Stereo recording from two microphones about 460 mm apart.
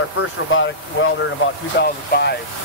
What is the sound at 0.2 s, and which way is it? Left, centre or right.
Speech, left.